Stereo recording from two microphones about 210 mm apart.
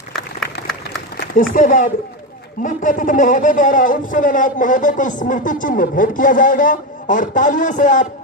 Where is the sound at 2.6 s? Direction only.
40° left (ahead or behind).